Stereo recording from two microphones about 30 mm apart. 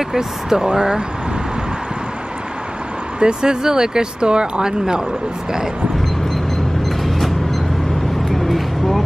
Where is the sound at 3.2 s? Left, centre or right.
Right.